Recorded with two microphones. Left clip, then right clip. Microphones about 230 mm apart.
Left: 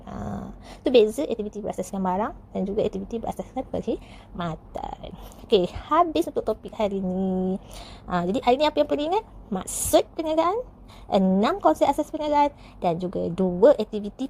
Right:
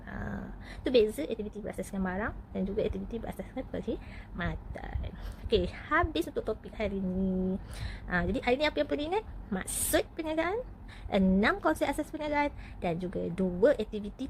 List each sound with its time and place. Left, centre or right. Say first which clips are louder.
0.9 s a woman's voice: left 8 dB; left
8.1 s a woman's voice: left 8 dB; left